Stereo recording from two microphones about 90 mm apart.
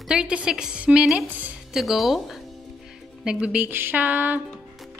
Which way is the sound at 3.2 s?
15° right (ahead or behind).